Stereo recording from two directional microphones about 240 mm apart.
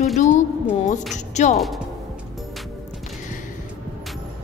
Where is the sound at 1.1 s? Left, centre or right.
Left.